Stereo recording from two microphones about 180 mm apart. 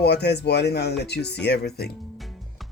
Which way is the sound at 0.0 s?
65° left (ahead or behind).